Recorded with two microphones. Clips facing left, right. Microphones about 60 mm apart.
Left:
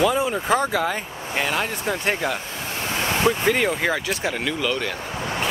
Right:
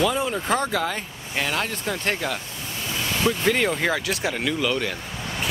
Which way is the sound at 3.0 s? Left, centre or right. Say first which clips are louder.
Left 3 dB; left.